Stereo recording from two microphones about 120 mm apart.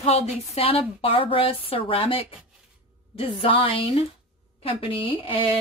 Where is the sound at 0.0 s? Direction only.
55° left (ahead or behind).